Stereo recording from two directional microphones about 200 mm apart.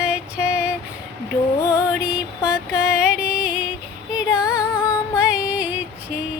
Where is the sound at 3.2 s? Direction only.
5° right (ahead or behind).